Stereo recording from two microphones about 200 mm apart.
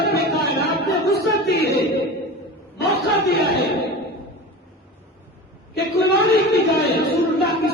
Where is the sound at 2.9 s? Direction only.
55° left (ahead or behind).